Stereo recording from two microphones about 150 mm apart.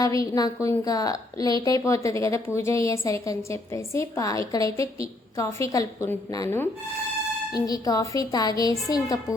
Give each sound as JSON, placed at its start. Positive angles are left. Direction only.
{"t": 0.0, "sound": "a woman's voice", "side_deg": 25}